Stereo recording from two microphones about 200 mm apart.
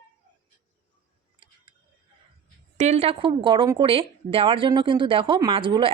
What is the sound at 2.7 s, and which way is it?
A woman's voice, 35° right (ahead or behind).